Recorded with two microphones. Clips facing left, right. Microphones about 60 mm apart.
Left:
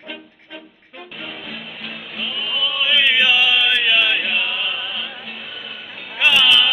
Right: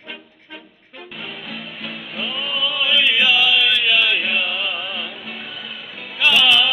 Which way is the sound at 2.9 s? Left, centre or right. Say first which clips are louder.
Left 1 dB; centre.